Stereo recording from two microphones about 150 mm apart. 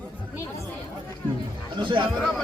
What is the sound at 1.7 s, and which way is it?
Speech, 35° right (ahead or behind).